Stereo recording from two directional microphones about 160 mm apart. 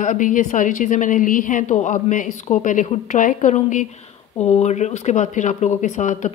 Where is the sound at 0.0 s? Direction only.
55° left (ahead or behind).